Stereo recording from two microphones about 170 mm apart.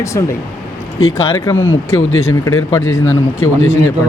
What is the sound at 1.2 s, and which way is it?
Speech, 15° left (ahead or behind).